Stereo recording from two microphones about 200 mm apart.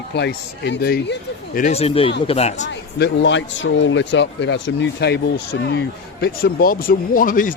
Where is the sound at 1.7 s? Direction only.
30° left (ahead or behind).